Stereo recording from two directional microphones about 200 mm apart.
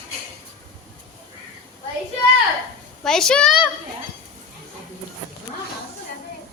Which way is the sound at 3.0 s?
Centre (ahead or behind).